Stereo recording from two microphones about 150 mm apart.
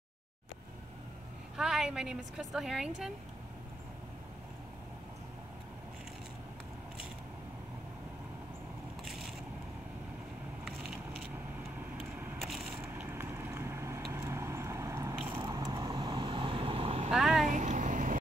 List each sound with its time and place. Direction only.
1.6 s a woman's voice: 5° right (ahead or behind)
12.0 s a sound: 5° right (ahead or behind)
12.9 s vehicle: 15° right (ahead or behind)
15.4 s vehicle: 25° right (ahead or behind); by 17.1 s 40° right (ahead or behind)
17.1 s vehicle: centre (ahead or behind)
17.5 s a sound: 55° right (ahead or behind)